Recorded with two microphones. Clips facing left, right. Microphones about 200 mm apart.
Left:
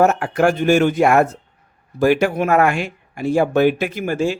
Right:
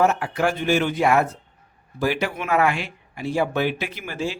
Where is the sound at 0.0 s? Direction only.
50° left (ahead or behind).